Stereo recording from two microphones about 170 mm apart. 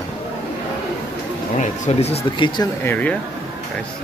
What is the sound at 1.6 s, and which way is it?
Speech, 40° left (ahead or behind).